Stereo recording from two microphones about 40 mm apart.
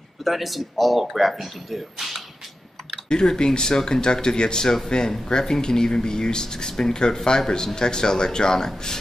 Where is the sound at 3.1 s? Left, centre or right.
Centre.